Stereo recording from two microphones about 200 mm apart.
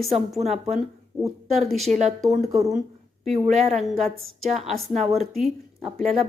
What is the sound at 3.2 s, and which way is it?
Speech, 35° right (ahead or behind).